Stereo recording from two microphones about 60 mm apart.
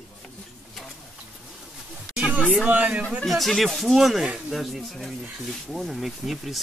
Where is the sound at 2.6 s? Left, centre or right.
Right.